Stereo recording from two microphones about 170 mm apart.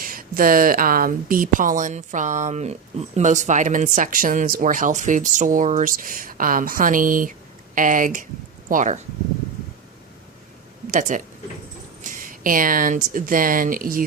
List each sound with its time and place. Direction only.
0.0 s speech: 55° right (ahead or behind)
10.9 s speech: 50° right (ahead or behind)